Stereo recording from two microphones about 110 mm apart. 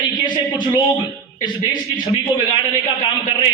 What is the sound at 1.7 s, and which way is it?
A man's voice, 45° left (ahead or behind).